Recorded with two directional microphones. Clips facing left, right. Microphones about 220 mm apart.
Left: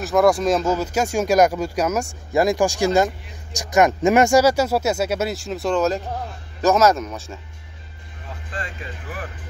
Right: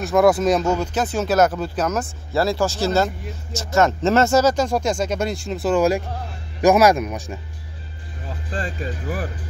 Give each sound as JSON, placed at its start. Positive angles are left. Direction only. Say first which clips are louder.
{"t": 0.0, "sound": "a man's voice", "louder": "right 1 dB", "side_deg": 0}
{"t": 8.5, "sound": "speech", "louder": "right 6 dB", "side_deg": -35}